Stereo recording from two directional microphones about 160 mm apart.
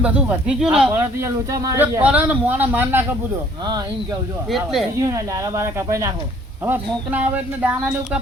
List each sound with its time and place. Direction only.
0.0 s speech: 10° right (ahead or behind)
0.9 s speech: 15° right (ahead or behind)
1.8 s speech: 10° right (ahead or behind)
4.5 s speech: centre (ahead or behind)
4.9 s speech: 20° right (ahead or behind)